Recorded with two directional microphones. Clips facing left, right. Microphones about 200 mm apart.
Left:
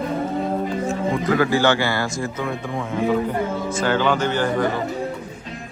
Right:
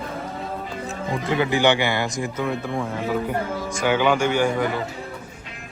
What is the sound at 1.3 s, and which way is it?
A man's voice, 20° right (ahead or behind).